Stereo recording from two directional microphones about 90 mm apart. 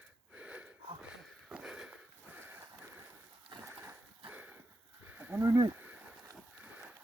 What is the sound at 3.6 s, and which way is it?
Dog, 30° right (ahead or behind).